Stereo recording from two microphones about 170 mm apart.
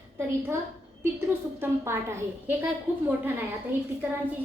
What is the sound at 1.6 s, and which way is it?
A woman's voice, 15° right (ahead or behind).